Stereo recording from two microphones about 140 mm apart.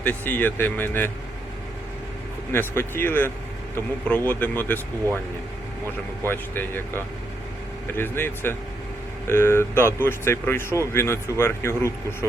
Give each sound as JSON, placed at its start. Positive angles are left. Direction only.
{"t": 0.0, "sound": "speech", "side_deg": 15}
{"t": 2.5, "sound": "speech", "side_deg": 15}
{"t": 6.2, "sound": "speech", "side_deg": 15}